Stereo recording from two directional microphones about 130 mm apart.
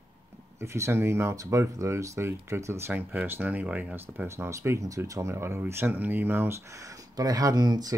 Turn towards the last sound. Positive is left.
turn(degrees=-30)  # may be behind; listen again after turning